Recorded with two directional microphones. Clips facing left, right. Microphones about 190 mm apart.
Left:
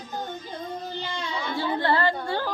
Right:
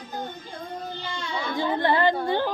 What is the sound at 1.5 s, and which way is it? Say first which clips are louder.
Music: right 2 dB; 15° right (ahead or behind).